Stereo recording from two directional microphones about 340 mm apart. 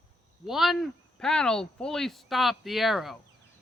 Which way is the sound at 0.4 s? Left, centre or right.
Centre.